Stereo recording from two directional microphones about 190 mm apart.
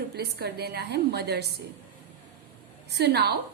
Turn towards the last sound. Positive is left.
turn(degrees=-60)  # may be behind; listen again after turning